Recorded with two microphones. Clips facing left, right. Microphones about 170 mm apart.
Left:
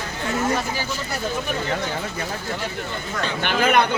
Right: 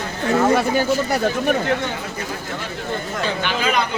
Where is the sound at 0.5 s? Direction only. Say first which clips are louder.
Right 8 dB; 60° right (ahead or behind).